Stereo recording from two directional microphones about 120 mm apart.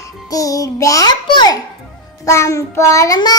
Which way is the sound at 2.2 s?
25° left (ahead or behind).